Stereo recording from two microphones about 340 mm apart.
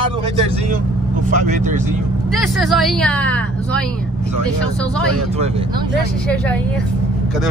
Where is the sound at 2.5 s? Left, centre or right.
Centre.